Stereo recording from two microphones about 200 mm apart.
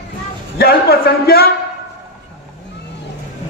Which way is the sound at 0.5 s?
50° left (ahead or behind).